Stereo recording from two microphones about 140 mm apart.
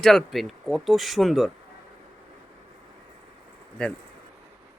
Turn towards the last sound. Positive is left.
turn(degrees=10)  # may be behind; listen again after turning